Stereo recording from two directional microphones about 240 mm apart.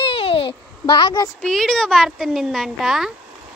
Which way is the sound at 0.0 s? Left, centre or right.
Left.